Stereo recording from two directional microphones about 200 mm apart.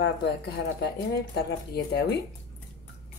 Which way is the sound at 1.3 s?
55° left (ahead or behind).